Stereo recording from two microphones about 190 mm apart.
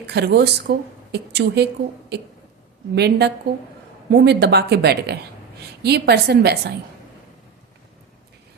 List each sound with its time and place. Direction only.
0.1 s speech: 60° right (ahead or behind)